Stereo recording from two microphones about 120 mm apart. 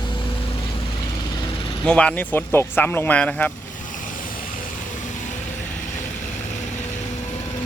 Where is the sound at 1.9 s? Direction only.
10° left (ahead or behind).